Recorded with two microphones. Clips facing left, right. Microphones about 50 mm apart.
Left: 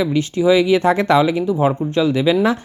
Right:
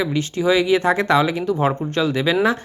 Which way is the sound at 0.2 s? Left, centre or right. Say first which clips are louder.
Left 4 dB; right.